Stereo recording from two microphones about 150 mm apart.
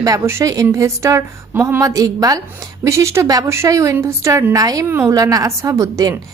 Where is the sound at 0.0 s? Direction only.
20° right (ahead or behind).